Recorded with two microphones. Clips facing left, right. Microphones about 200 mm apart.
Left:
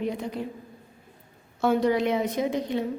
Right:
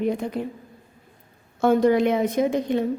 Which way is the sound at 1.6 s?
50° right (ahead or behind).